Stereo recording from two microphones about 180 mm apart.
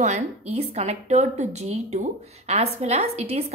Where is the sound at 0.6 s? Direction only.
35° right (ahead or behind).